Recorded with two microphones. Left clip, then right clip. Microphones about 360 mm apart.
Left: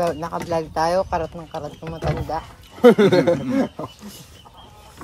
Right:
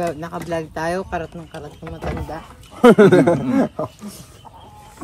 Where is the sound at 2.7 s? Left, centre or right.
Centre.